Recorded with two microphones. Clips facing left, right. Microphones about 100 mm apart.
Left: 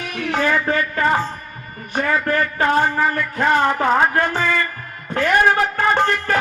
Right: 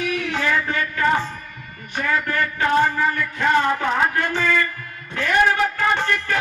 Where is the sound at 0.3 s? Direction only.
40° left (ahead or behind).